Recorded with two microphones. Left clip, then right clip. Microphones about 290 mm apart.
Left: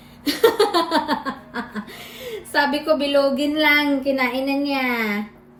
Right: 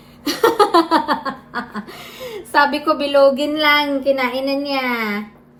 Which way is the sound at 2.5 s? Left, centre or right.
Right.